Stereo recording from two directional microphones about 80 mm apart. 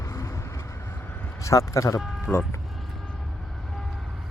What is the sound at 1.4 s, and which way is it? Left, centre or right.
Speech, left.